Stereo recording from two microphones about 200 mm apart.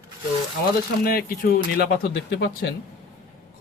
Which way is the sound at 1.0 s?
50° left (ahead or behind).